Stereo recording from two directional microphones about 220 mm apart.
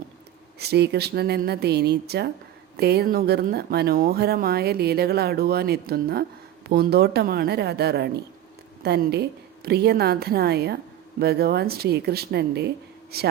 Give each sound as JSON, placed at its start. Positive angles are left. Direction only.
{"t": 0.6, "sound": "speech", "side_deg": -50}